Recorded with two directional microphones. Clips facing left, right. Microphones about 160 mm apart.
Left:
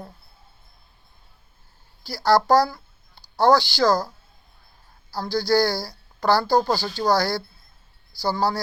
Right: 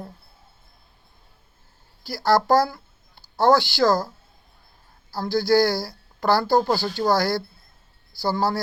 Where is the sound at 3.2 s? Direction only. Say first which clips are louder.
Left 1 dB; 20° right (ahead or behind).